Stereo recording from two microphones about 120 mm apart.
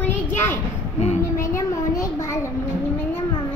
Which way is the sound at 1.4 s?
25° left (ahead or behind).